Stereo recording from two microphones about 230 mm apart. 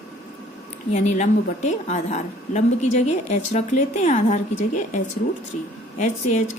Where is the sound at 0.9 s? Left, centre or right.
Left.